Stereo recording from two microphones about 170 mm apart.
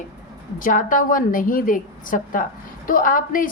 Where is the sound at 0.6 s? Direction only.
50° left (ahead or behind).